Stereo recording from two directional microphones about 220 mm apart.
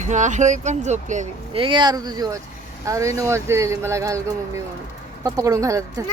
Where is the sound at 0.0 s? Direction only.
35° right (ahead or behind).